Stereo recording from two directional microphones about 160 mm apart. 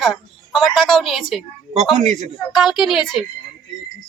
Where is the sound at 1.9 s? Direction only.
45° right (ahead or behind).